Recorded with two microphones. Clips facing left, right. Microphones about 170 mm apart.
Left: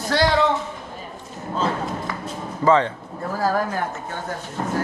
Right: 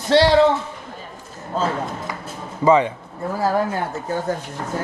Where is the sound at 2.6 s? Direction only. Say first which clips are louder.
Right 2 dB; 10° right (ahead or behind).